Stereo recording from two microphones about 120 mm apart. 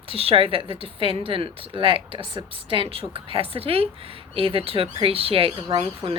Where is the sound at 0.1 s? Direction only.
50° right (ahead or behind).